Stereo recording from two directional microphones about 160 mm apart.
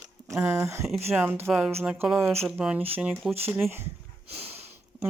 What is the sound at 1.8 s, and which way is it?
Speech, 15° right (ahead or behind).